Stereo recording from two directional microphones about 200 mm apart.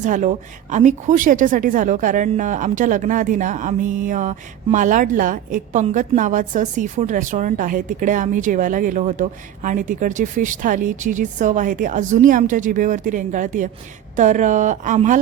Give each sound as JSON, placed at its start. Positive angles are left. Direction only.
{"t": 0.0, "sound": "a woman's voice", "side_deg": -40}